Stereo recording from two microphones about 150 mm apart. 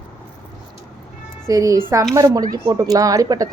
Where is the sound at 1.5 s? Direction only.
20° right (ahead or behind).